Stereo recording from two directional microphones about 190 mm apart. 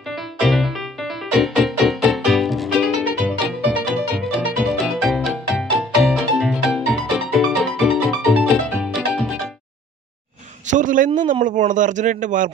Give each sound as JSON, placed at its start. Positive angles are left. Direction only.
{"t": 0.4, "sound": "music", "side_deg": 0}
{"t": 10.7, "sound": "a sound", "side_deg": -45}
{"t": 11.4, "sound": "speech", "side_deg": -40}